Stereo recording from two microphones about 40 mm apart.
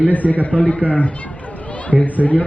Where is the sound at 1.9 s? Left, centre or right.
Centre.